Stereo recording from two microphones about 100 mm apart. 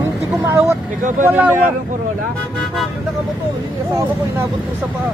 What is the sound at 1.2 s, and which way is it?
Speech, 20° right (ahead or behind).